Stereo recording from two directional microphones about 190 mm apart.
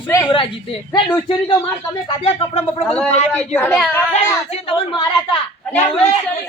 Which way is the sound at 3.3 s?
5° left (ahead or behind).